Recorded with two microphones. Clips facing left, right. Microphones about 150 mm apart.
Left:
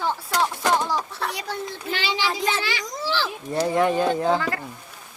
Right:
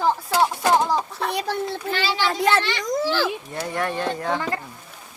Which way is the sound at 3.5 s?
30° left (ahead or behind).